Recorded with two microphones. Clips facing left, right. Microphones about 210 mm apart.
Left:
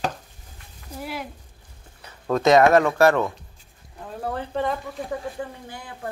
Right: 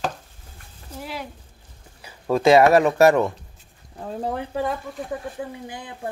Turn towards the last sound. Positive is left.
turn(degrees=-20)  # may be behind; listen again after turning